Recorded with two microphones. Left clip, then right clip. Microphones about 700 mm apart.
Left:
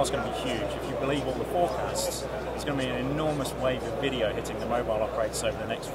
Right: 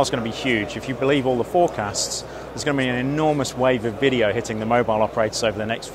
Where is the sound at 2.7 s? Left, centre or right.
Right.